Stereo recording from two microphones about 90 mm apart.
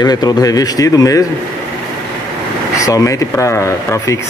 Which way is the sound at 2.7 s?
40° left (ahead or behind).